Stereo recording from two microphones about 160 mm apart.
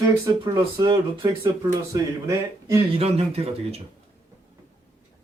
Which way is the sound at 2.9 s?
40° right (ahead or behind).